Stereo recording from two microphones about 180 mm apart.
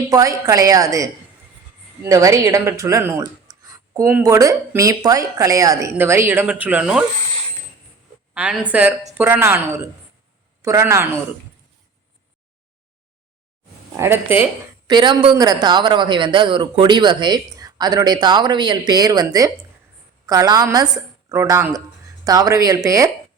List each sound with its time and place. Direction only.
0.1 s speech: 20° right (ahead or behind)
8.3 s speech: 10° right (ahead or behind)
13.9 s speech: 15° right (ahead or behind)
14.8 s speech: 25° right (ahead or behind)